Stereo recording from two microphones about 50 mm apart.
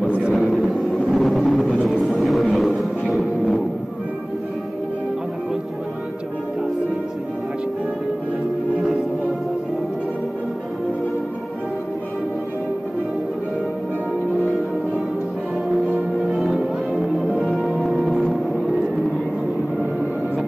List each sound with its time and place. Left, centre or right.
0.3 s vehicle: centre
2.1 s music: centre
16.2 s music: centre